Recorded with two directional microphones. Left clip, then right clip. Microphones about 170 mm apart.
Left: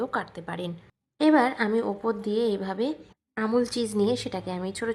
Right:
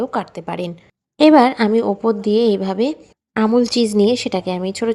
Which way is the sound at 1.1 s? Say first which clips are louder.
Right 10 dB; 35° right (ahead or behind).